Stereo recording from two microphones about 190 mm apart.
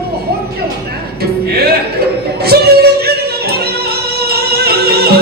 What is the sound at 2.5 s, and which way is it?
Music, 55° right (ahead or behind).